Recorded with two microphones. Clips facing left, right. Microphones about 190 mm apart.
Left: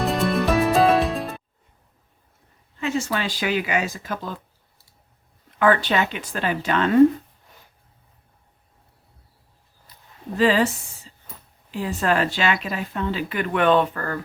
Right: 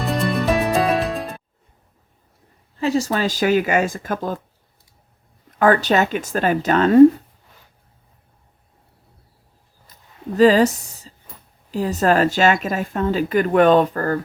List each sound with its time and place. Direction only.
0.0 s music: centre (ahead or behind)
2.7 s speech: 35° right (ahead or behind)
5.5 s speech: 40° right (ahead or behind)
9.9 s a sound: 45° right (ahead or behind)
10.3 s speech: 40° right (ahead or behind)